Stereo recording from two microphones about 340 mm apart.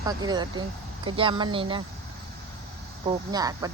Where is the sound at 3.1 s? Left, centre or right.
Centre.